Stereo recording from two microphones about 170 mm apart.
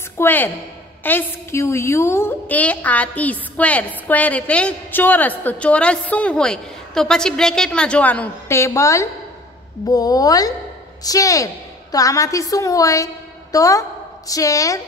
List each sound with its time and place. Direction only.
0.2 s a woman's voice: 10° left (ahead or behind)